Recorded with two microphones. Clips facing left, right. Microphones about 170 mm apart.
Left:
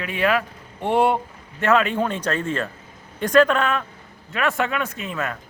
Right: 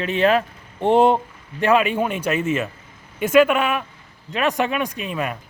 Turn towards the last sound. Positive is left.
turn(degrees=-15)  # may be behind; listen again after turning